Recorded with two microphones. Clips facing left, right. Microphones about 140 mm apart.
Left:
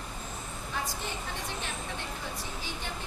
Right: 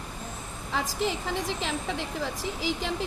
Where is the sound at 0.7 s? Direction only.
90° right.